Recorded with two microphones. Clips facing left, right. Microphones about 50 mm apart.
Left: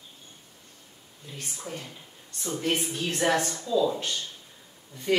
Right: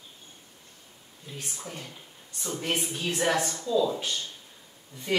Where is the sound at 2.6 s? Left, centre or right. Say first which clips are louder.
Left 2 dB; centre.